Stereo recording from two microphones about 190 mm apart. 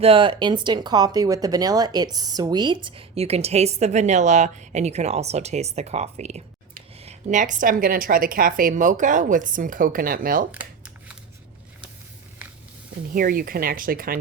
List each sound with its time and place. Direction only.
0.0 s speech: 30° right (ahead or behind); by 10.4 s 50° right (ahead or behind)
10.5 s computer keyboard: 5° right (ahead or behind)
13.1 s speech: 50° right (ahead or behind)